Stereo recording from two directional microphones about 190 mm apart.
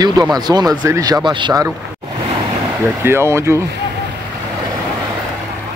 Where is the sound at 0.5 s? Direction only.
20° right (ahead or behind).